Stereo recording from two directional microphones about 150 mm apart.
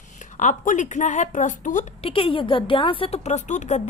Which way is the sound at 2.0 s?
35° left (ahead or behind).